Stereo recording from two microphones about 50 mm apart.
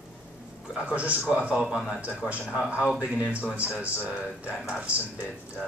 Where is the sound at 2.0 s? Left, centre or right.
Right.